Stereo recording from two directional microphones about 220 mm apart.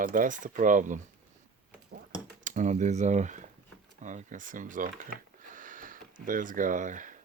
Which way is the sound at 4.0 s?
35° right (ahead or behind).